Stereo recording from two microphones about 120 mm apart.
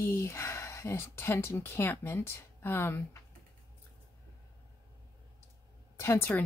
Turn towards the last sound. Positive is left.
turn(degrees=20)  # may be behind; listen again after turning